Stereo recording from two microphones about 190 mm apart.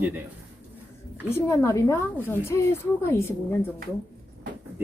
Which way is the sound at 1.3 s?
15° left (ahead or behind).